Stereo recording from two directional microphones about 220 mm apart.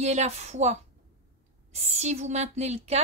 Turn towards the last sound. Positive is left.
turn(degrees=-30)  # may be behind; listen again after turning